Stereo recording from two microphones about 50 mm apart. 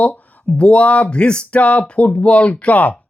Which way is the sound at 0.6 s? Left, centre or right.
Left.